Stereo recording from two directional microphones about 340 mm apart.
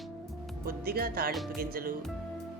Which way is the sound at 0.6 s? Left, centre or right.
Right.